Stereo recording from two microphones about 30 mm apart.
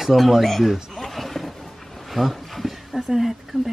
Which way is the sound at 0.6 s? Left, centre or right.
Centre.